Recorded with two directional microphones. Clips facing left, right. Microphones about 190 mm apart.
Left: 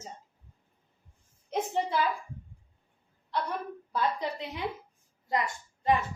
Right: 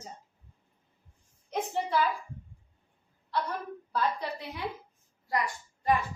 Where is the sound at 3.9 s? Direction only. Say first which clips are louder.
Left 1 dB; 20° left (ahead or behind).